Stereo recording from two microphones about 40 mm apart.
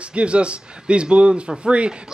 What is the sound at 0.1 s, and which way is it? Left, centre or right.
Speech, right.